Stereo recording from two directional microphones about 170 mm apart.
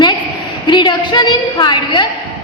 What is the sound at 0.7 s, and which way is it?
A woman's voice, 25° left (ahead or behind).